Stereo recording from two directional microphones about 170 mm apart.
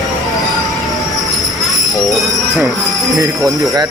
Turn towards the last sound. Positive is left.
turn(degrees=-20)  # may be behind; listen again after turning